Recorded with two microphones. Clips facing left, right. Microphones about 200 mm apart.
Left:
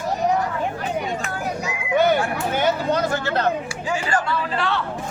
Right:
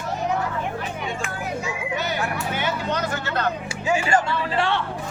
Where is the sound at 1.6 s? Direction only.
50° left (ahead or behind); by 3.4 s 30° left (ahead or behind).